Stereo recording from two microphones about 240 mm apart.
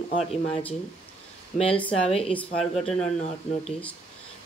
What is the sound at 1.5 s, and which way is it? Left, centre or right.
Speech, centre.